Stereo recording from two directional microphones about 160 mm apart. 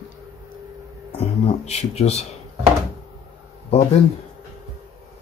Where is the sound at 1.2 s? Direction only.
40° left (ahead or behind).